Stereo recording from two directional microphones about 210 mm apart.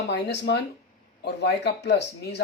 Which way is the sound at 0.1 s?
55° left (ahead or behind).